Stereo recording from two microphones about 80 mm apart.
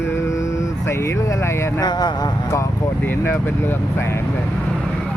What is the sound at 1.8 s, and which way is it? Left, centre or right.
Speech, left.